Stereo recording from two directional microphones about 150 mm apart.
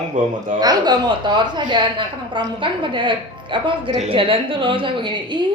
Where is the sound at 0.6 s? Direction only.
25° right (ahead or behind).